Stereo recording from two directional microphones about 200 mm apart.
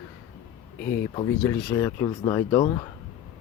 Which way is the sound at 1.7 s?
15° left (ahead or behind).